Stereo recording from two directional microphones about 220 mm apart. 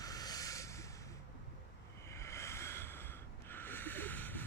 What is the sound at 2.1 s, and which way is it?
Snort, 10° left (ahead or behind).